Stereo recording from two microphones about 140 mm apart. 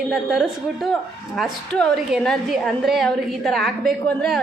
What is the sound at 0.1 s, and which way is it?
A woman's voice, centre (ahead or behind).